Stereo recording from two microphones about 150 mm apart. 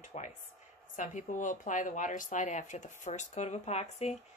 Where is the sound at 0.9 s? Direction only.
60° left (ahead or behind).